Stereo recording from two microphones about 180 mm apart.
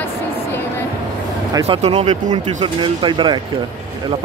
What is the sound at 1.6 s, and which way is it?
Speech, 35° right (ahead or behind).